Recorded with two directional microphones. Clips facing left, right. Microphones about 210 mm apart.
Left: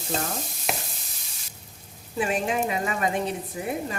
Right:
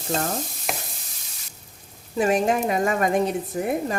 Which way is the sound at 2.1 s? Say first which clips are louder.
Right 5 dB; 40° right (ahead or behind).